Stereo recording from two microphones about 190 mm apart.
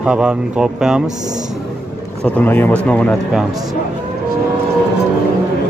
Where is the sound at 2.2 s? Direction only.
10° left (ahead or behind).